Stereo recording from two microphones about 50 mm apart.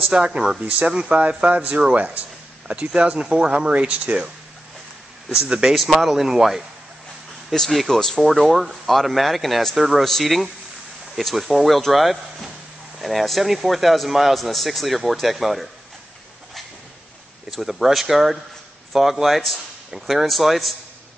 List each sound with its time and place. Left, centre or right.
0.1 s speech: centre
1.4 s speech: right
2.7 s speech: centre
5.5 s speech: centre
7.5 s speech: centre
17.5 s speech: centre